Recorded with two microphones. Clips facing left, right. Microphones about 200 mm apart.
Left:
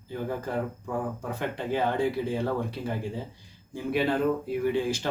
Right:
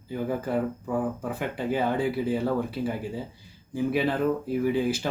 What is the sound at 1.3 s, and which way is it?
Speech, 5° right (ahead or behind).